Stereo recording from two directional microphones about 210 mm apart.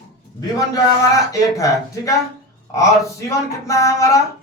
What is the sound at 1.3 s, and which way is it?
A man's voice, 15° left (ahead or behind).